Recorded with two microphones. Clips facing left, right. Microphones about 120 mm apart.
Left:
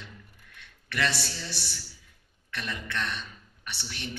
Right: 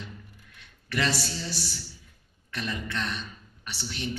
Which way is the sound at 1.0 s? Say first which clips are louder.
Even; 65° left (ahead or behind).